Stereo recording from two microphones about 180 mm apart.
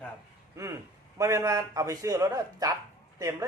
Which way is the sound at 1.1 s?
15° right (ahead or behind).